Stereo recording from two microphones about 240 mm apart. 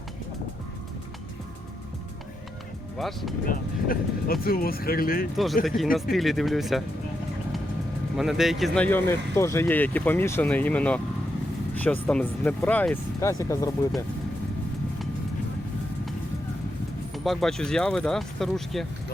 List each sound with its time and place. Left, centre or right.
3.0 s speech: centre
3.4 s speech: left
5.6 s speech: centre
8.1 s speech: centre
17.2 s speech: centre